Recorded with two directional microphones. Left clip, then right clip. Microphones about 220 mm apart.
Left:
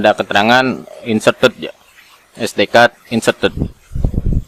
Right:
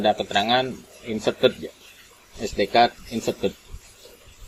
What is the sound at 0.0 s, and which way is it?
Speech, 30° left (ahead or behind).